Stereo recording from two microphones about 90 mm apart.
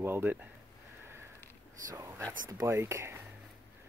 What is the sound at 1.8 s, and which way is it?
Speech, 40° right (ahead or behind).